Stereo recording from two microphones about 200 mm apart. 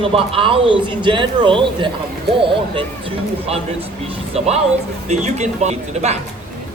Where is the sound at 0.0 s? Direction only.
25° right (ahead or behind).